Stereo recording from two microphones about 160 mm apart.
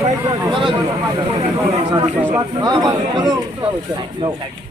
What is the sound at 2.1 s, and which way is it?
Speech, 10° right (ahead or behind).